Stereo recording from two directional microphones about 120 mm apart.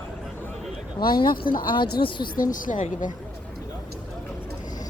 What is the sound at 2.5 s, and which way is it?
Speech, 90° left.